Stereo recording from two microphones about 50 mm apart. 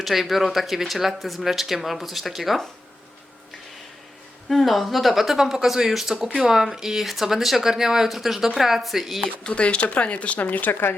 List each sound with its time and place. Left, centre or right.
0.0 s speech: centre
4.4 s speech: centre
9.2 s speech: centre; by 10.8 s left